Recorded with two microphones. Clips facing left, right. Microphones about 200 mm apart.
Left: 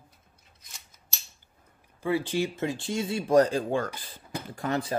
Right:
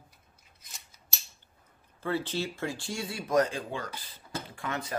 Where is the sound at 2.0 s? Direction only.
15° left (ahead or behind); by 3.6 s 35° left (ahead or behind).